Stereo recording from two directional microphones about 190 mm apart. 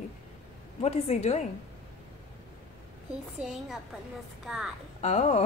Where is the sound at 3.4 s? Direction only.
Centre (ahead or behind).